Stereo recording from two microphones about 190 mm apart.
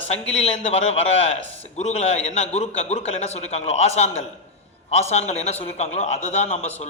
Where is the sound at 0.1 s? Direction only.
35° left (ahead or behind).